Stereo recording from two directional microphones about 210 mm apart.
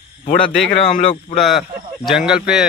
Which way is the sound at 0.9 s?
30° left (ahead or behind).